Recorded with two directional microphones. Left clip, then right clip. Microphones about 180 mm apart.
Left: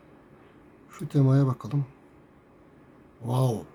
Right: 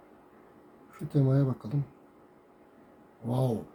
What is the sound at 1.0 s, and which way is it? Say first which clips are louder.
Speech: left 3 dB; 30° left (ahead or behind).